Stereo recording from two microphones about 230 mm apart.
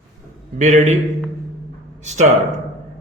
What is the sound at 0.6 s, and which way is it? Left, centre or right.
Speech, right.